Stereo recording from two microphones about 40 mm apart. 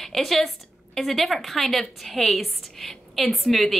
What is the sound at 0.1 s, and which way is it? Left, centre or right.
A woman's voice, centre.